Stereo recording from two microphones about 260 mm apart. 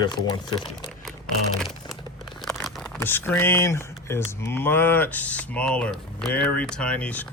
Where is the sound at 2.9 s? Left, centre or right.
Centre.